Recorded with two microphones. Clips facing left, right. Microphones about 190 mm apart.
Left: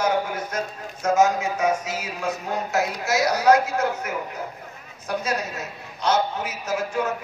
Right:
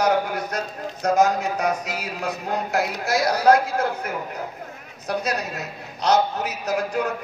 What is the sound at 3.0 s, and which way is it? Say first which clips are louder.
Speech: right 2 dB; 35° right (ahead or behind).